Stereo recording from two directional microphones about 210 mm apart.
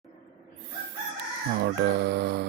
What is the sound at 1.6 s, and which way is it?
Speech, 55° right (ahead or behind).